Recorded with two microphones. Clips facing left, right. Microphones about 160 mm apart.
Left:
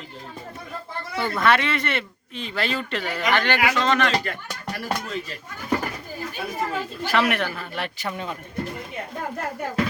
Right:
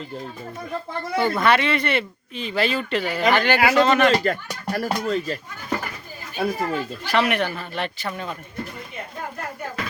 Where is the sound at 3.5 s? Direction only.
40° right (ahead or behind).